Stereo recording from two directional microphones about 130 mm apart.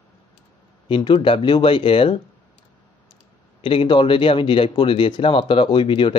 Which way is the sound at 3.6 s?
40° left (ahead or behind).